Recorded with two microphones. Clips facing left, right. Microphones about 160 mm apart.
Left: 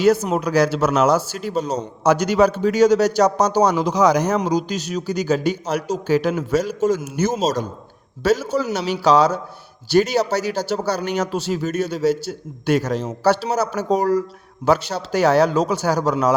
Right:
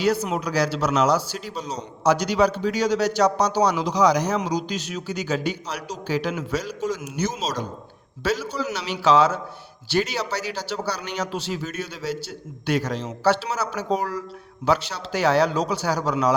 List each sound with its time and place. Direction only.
0.0 s speech: 45° left (ahead or behind)